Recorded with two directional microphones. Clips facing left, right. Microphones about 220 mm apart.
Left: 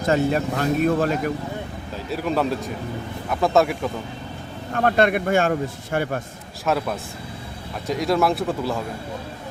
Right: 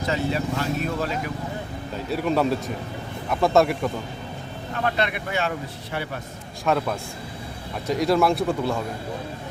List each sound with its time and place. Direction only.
0.0 s speech: 50° left (ahead or behind)
2.0 s speech: centre (ahead or behind)
4.7 s speech: 50° left (ahead or behind)
6.7 s speech: 5° left (ahead or behind)